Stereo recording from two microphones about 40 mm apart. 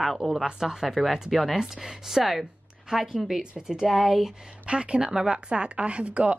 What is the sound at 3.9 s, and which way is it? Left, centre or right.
Speech, centre.